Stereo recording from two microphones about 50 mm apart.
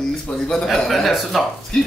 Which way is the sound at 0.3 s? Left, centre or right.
Left.